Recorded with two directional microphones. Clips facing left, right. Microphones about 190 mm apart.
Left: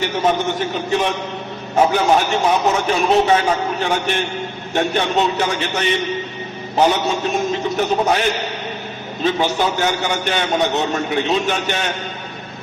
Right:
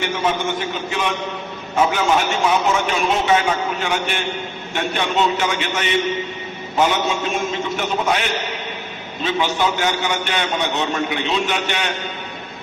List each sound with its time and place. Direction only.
0.2 s a man's voice: 40° left (ahead or behind)
7.8 s a man's voice: 40° left (ahead or behind)
9.2 s a man's voice: 40° left (ahead or behind)